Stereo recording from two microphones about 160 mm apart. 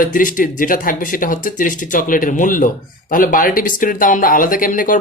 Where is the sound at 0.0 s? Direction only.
55° left (ahead or behind).